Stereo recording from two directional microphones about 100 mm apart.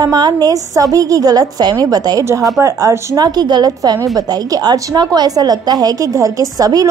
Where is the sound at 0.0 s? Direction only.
45° right (ahead or behind).